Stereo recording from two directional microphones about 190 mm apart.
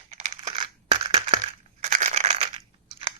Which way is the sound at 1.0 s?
30° right (ahead or behind).